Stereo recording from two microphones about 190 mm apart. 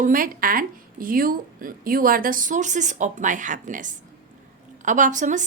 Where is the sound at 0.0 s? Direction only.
45° right (ahead or behind).